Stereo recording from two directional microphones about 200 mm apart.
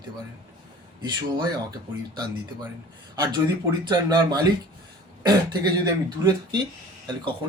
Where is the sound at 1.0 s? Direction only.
20° right (ahead or behind).